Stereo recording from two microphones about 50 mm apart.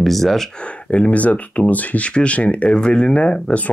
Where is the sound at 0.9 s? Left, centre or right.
Left.